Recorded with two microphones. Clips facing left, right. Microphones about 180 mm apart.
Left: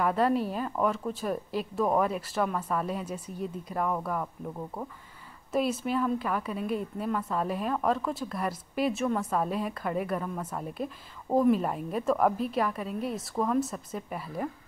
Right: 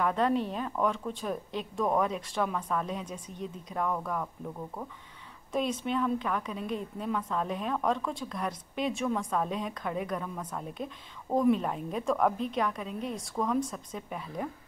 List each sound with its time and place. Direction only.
0.0 s a woman's voice: 5° left (ahead or behind)